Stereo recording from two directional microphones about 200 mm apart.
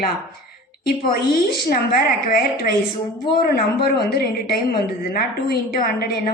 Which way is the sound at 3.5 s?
50° left (ahead or behind).